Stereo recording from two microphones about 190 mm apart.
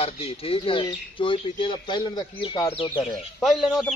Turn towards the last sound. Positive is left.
turn(degrees=0)  # may be behind; listen again after turning